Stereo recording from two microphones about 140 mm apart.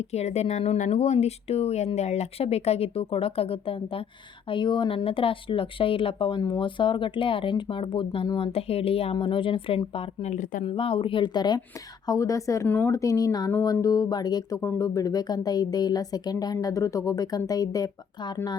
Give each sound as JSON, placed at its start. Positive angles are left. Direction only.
{"t": 0.0, "sound": "speech", "side_deg": 50}
{"t": 10.3, "sound": "speech", "side_deg": 65}
{"t": 10.6, "sound": "speech", "side_deg": 40}